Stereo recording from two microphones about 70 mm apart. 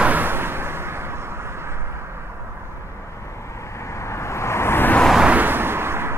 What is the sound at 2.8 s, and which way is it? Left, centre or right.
Vehicle, left.